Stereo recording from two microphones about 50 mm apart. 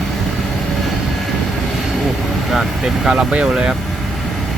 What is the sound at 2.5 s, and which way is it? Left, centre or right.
Speech, centre.